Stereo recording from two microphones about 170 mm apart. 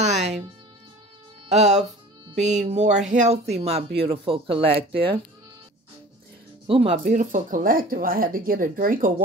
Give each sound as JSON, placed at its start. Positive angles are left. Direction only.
{"t": 1.5, "sound": "speech", "side_deg": -40}
{"t": 6.7, "sound": "speech", "side_deg": -35}
{"t": 7.1, "sound": "speech", "side_deg": -50}